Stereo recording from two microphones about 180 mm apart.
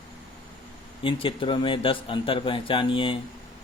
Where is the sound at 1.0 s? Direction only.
30° left (ahead or behind).